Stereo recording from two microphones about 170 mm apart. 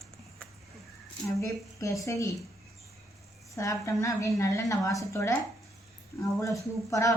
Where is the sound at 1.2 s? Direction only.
20° left (ahead or behind).